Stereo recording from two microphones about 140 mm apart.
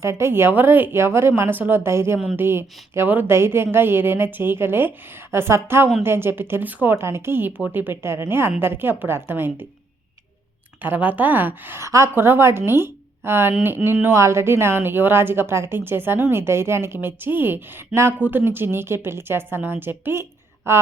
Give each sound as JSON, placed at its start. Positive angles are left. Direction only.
{"t": 0.0, "sound": "a woman's voice", "side_deg": -20}
{"t": 10.8, "sound": "a woman's voice", "side_deg": -10}